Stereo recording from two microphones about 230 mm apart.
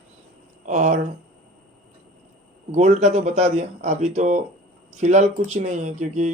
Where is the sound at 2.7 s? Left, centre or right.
Right.